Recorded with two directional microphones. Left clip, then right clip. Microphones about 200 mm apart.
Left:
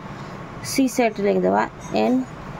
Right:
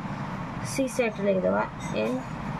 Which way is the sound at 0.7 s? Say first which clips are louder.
Left 7 dB; 50° left (ahead or behind).